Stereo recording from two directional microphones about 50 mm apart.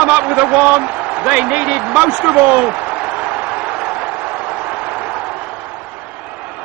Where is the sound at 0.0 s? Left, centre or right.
Right.